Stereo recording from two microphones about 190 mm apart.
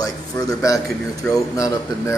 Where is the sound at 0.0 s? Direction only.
20° left (ahead or behind).